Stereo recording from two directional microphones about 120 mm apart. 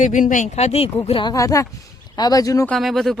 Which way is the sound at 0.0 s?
90° left.